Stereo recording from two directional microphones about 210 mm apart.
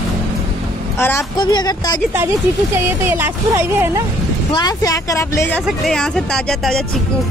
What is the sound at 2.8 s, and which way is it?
Speech, 10° right (ahead or behind).